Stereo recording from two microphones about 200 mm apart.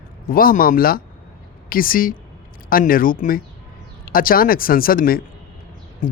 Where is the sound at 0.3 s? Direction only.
45° left (ahead or behind).